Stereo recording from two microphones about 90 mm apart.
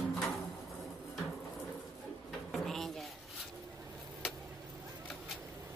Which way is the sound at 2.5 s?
5° left (ahead or behind).